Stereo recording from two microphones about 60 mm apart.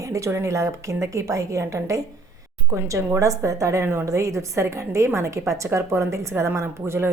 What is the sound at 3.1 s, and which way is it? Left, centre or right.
A woman's voice, right.